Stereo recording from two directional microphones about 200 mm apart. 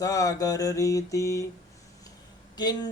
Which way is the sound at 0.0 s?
15° left (ahead or behind).